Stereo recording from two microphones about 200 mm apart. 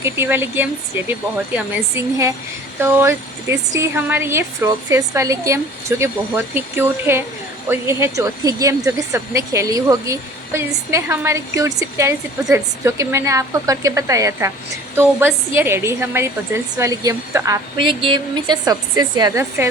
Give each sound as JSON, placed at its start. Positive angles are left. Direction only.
{"t": 0.0, "sound": "a woman's voice", "side_deg": -10}